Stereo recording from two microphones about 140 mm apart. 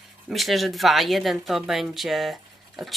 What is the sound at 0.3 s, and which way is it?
Speech, centre (ahead or behind).